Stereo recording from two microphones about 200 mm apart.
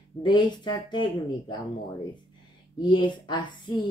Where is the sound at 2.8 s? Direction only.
20° left (ahead or behind).